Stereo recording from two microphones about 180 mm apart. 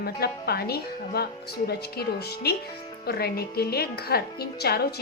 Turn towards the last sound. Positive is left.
turn(degrees=60)  # may be behind; listen again after turning